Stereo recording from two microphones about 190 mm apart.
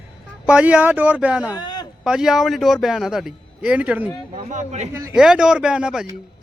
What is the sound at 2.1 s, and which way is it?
A man's voice, 5° right (ahead or behind).